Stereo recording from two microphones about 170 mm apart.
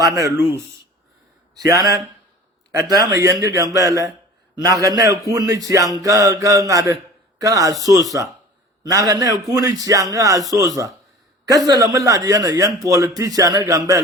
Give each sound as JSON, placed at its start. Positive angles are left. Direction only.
{"t": 0.0, "sound": "a man's voice", "side_deg": -20}